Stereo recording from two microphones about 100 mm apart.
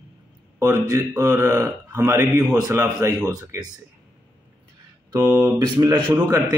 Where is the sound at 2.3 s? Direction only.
10° right (ahead or behind).